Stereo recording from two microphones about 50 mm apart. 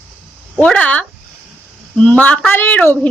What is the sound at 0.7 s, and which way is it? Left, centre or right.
Speech, left.